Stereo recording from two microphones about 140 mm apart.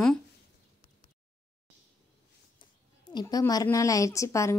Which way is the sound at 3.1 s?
30° left (ahead or behind).